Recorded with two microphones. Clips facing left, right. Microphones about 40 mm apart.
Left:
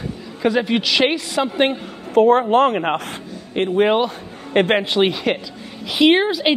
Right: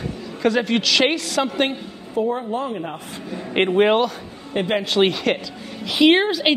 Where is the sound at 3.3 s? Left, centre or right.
Right.